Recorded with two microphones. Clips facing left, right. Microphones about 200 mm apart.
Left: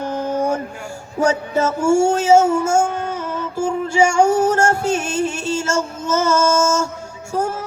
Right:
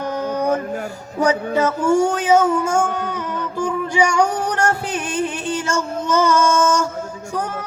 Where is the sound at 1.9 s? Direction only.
25° left (ahead or behind).